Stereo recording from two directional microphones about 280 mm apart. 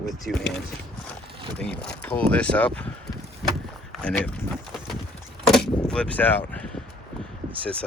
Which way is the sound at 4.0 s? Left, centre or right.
Centre.